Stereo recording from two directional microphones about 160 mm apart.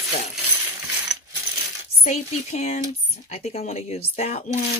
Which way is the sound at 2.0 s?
45° left (ahead or behind).